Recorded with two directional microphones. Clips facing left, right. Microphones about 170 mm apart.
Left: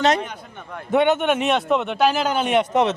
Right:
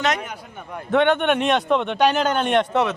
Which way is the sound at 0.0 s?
30° left (ahead or behind).